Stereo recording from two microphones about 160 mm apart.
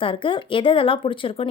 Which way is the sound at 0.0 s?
30° left (ahead or behind).